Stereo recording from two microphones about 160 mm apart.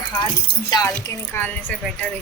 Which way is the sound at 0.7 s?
25° left (ahead or behind).